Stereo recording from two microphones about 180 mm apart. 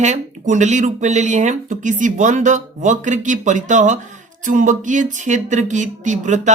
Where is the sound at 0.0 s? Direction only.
40° right (ahead or behind).